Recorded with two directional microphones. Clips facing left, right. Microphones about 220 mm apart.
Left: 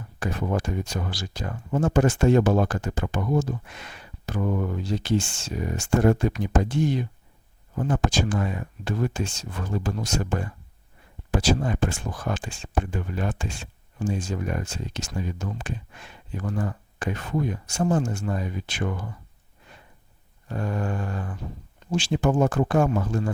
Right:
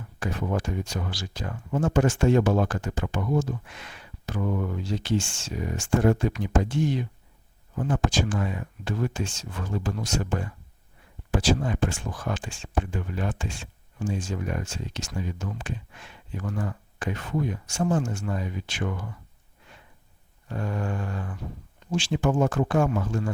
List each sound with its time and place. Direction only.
0.2 s speech: 40° left (ahead or behind)
20.5 s speech: 45° left (ahead or behind)